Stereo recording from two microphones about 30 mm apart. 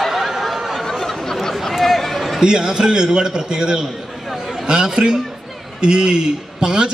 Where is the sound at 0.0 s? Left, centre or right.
Centre.